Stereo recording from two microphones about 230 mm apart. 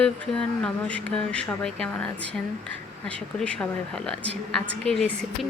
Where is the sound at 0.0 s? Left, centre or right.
Centre.